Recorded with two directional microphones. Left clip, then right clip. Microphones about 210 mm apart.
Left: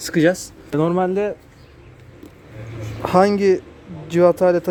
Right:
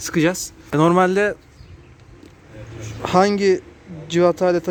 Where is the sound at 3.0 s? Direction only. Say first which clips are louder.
Left 1 dB; 5° right (ahead or behind).